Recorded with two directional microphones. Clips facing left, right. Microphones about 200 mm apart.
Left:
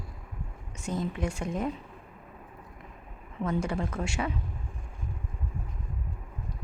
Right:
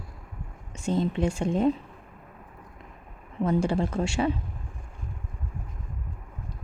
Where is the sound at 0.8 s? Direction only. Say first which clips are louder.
Right 6 dB; 25° right (ahead or behind).